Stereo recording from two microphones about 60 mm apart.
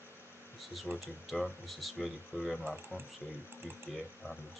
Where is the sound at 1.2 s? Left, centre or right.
Centre.